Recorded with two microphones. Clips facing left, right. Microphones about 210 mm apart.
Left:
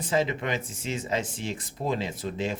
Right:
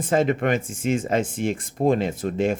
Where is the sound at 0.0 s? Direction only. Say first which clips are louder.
Right 6 dB; 50° right (ahead or behind).